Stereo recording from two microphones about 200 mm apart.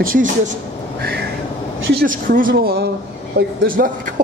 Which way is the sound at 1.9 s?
45° right (ahead or behind).